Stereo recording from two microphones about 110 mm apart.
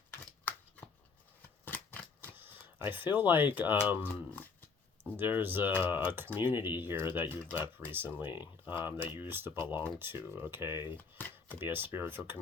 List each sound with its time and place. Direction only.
0.5 s shuffling cards: 15° left (ahead or behind)
1.4 s a sound: 15° left (ahead or behind)
2.3 s speech: 20° right (ahead or behind)
4.1 s speech: 15° left (ahead or behind)
5.1 s speech: 20° right (ahead or behind)
10.9 s chopping: 15° left (ahead or behind)
11.6 s speech: 20° right (ahead or behind)